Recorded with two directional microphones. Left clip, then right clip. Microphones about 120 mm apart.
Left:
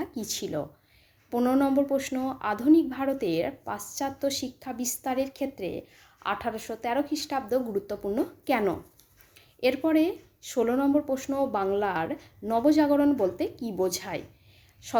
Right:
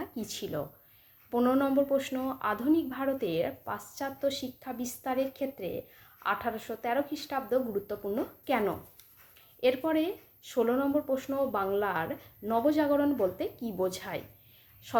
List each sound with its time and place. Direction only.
0.0 s a woman's voice: 30° left (ahead or behind)